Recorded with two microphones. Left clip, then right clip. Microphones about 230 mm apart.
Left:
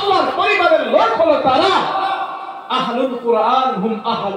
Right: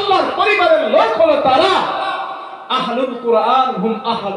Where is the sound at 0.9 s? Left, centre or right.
Right.